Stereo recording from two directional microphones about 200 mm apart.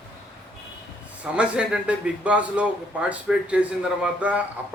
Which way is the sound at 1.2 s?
5° right (ahead or behind).